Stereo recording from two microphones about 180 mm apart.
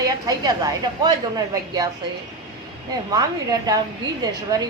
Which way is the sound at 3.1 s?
20° right (ahead or behind).